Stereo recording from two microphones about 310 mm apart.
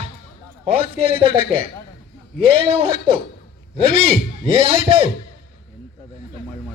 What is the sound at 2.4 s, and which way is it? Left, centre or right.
Speech, centre.